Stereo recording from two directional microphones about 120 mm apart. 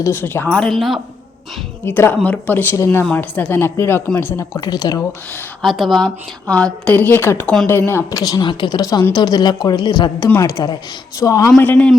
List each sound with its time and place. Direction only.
0.0 s a woman's voice: 15° left (ahead or behind); by 0.9 s centre (ahead or behind)
1.8 s a woman's voice: 20° left (ahead or behind); by 5.0 s 35° left (ahead or behind)
5.6 s a woman's voice: centre (ahead or behind); by 8.2 s 20° left (ahead or behind)
8.2 s speech: 35° left (ahead or behind)
11.5 s a woman's voice: 10° left (ahead or behind)